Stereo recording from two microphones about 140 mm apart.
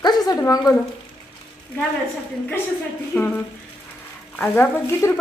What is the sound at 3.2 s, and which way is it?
Speech, 10° left (ahead or behind).